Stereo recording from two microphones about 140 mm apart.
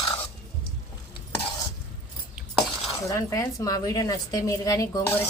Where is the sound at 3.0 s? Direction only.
20° left (ahead or behind).